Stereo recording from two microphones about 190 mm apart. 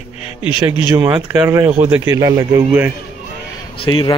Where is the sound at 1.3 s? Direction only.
15° right (ahead or behind).